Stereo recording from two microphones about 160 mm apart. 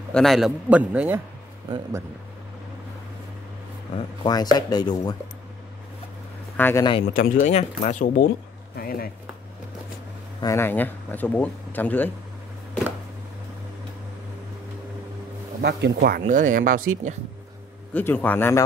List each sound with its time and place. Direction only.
0.1 s a man's voice: centre (ahead or behind); by 2.0 s 20° right (ahead or behind)
4.2 s speech: 25° left (ahead or behind)
6.5 s speech: 10° left (ahead or behind)
6.8 s speech: 30° left (ahead or behind)
7.2 s speech: 50° left (ahead or behind)
8.0 s speech: 60° left (ahead or behind)
10.4 s speech: 15° left (ahead or behind)
15.6 s speech: 85° right
16.3 s speech: 50° right (ahead or behind)
17.9 s speech: 10° left (ahead or behind)